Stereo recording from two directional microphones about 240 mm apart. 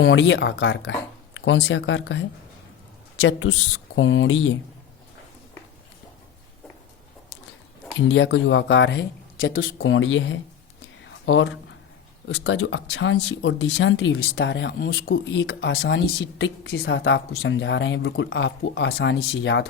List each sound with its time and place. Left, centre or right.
0.0 s speech: left
7.9 s speech: left